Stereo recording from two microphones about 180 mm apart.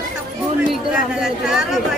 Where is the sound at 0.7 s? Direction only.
5° right (ahead or behind).